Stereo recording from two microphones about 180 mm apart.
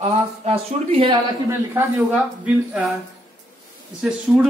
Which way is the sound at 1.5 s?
10° right (ahead or behind).